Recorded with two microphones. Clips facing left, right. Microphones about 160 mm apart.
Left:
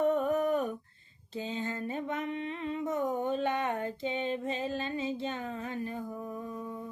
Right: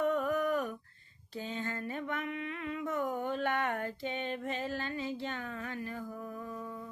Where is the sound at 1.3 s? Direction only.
20° left (ahead or behind).